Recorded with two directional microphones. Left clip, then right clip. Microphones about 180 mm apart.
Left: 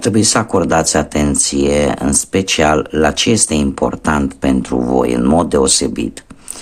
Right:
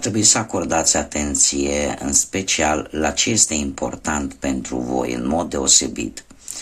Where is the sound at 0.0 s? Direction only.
30° left (ahead or behind).